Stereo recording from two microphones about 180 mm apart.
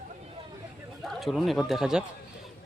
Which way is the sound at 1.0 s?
Centre (ahead or behind).